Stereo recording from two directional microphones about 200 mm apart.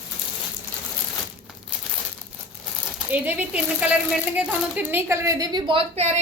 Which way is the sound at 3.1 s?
5° right (ahead or behind).